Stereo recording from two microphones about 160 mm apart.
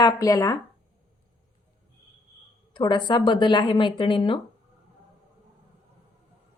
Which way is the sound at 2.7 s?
30° left (ahead or behind).